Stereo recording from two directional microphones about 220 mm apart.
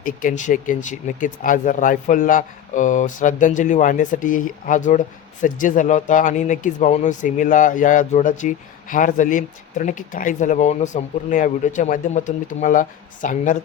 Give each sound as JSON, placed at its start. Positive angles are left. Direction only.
{"t": 0.0, "sound": "speech", "side_deg": 35}